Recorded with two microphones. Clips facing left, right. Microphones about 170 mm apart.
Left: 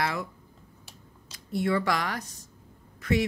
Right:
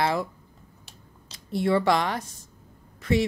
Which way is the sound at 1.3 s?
25° right (ahead or behind).